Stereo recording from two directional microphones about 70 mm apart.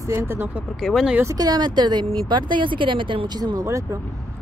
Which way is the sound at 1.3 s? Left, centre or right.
Right.